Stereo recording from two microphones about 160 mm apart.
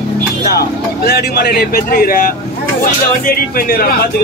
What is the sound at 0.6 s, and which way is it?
Speech, 80° left.